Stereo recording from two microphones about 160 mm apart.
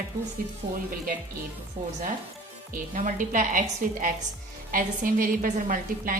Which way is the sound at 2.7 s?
55° right (ahead or behind).